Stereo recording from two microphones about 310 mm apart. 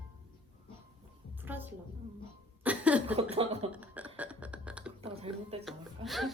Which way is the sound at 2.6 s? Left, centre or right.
Centre.